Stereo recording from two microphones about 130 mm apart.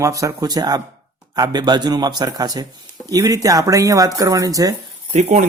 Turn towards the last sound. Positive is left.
turn(degrees=-60)  # may be behind; listen again after turning